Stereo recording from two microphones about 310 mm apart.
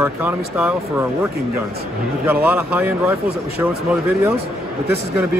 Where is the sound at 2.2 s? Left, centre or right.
Centre.